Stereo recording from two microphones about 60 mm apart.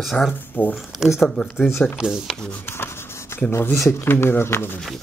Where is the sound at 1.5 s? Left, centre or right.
Left.